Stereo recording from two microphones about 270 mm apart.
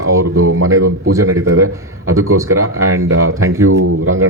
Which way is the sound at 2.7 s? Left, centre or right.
Right.